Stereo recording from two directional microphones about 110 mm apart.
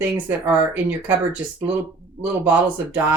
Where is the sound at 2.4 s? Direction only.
20° right (ahead or behind).